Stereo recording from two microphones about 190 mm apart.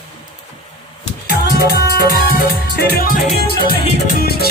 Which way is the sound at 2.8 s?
50° left (ahead or behind).